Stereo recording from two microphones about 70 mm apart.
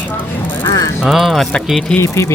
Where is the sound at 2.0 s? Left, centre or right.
Left.